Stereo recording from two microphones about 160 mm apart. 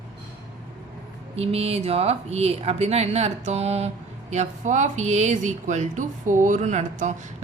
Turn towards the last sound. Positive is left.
turn(degrees=-45)  # may be behind; listen again after turning